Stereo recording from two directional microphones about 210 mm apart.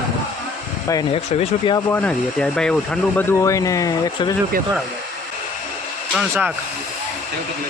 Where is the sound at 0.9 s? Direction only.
20° left (ahead or behind).